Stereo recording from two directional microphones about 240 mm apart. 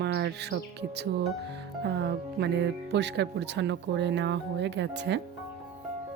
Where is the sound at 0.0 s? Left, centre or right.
Right.